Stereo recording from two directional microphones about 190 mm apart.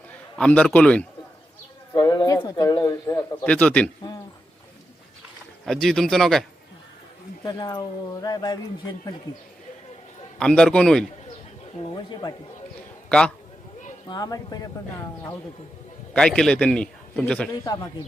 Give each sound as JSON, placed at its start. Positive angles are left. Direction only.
{"t": 0.3, "sound": "a man's voice", "side_deg": 5}
{"t": 1.9, "sound": "speech", "side_deg": 20}
{"t": 3.4, "sound": "a man's voice", "side_deg": 5}
{"t": 5.6, "sound": "a man's voice", "side_deg": 0}
{"t": 7.4, "sound": "speech", "side_deg": 20}
{"t": 10.3, "sound": "a man's voice", "side_deg": 5}
{"t": 11.8, "sound": "speech", "side_deg": 25}
{"t": 13.1, "sound": "a man's voice", "side_deg": 5}
{"t": 14.1, "sound": "speech", "side_deg": 20}
{"t": 16.1, "sound": "a man's voice", "side_deg": 5}
{"t": 17.5, "sound": "speech", "side_deg": 20}